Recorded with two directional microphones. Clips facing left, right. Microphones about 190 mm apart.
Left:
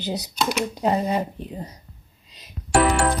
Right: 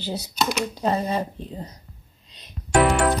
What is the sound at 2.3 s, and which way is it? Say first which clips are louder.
Music: left 3 dB; 5° left (ahead or behind).